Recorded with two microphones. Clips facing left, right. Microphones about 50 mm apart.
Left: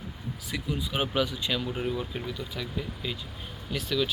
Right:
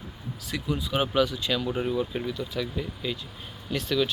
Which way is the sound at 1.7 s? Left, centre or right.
Centre.